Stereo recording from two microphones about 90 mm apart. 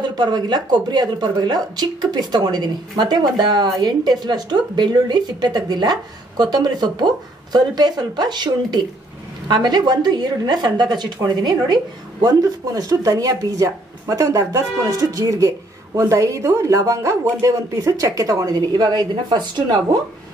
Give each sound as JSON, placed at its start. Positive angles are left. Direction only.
{"t": 0.0, "sound": "a woman's voice", "side_deg": -50}